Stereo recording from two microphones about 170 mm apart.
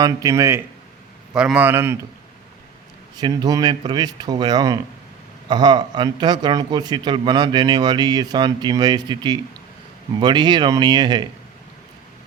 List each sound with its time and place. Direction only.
0.0 s a man's voice: 20° right (ahead or behind)
1.3 s a man's voice: 5° right (ahead or behind)
3.2 s a man's voice: 25° right (ahead or behind)